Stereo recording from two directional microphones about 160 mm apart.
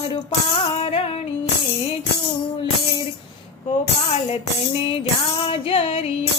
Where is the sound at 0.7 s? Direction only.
40° left (ahead or behind).